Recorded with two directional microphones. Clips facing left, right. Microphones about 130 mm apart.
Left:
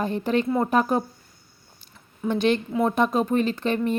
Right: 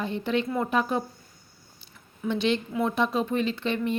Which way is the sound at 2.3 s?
45° left (ahead or behind).